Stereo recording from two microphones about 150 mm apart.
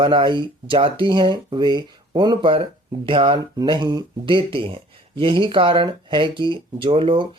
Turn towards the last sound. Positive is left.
turn(degrees=-35)  # may be behind; listen again after turning